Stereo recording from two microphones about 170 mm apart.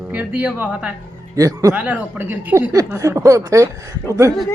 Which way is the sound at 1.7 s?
10° right (ahead or behind).